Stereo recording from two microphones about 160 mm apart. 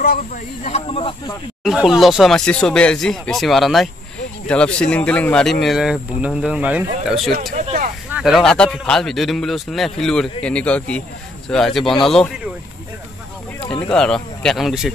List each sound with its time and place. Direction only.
0.0 s speech: 70° left (ahead or behind)
0.7 s speech: 40° left (ahead or behind)
1.6 s a man's voice: 5° right (ahead or behind)
7.5 s a sound: 50° right (ahead or behind)
8.1 s a man's voice: centre (ahead or behind)
13.6 s speech: 30° left (ahead or behind)
13.9 s a man's voice: 5° left (ahead or behind)